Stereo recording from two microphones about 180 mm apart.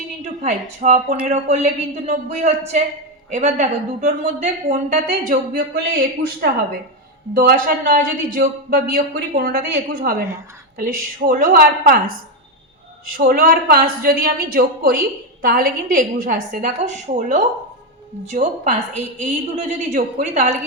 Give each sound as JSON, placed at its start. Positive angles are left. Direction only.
{"t": 0.4, "sound": "a man's voice", "side_deg": -45}